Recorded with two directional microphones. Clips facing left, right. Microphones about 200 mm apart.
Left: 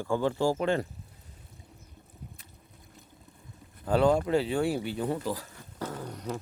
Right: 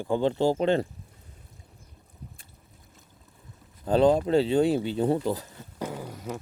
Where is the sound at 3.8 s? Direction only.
20° right (ahead or behind).